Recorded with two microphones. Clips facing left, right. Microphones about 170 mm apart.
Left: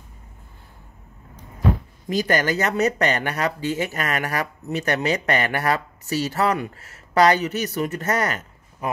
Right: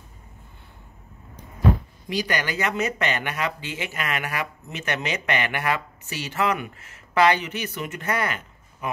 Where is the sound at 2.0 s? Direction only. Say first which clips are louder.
Left 5 dB; 45° left (ahead or behind).